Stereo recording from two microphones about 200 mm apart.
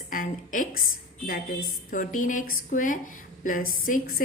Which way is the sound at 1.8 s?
40° left (ahead or behind).